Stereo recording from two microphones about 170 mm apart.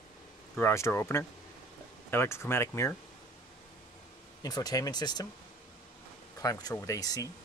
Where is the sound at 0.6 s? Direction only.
15° left (ahead or behind).